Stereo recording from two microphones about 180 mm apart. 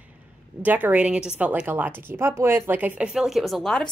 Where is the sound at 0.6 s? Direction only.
10° right (ahead or behind).